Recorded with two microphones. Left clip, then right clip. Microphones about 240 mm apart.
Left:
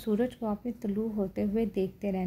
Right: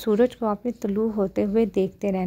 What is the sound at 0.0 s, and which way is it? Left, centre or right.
A woman's voice, right.